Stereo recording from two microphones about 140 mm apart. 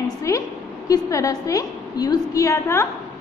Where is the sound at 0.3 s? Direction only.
25° left (ahead or behind).